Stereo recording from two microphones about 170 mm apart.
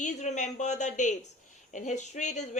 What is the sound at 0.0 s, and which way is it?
A woman's voice, 45° left (ahead or behind).